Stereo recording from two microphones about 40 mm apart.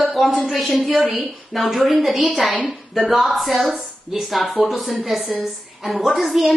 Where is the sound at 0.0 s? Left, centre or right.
Centre.